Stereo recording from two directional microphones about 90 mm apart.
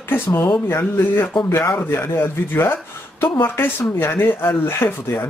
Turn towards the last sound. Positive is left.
turn(degrees=25)  # may be behind; listen again after turning